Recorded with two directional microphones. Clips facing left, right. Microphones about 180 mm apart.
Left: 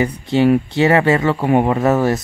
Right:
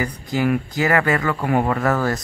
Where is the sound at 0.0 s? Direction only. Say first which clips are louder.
Left 7 dB; 25° left (ahead or behind).